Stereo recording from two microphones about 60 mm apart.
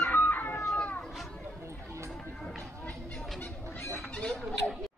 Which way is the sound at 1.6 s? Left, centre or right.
Right.